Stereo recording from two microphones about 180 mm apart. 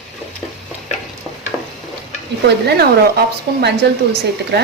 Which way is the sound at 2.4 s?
65° right (ahead or behind).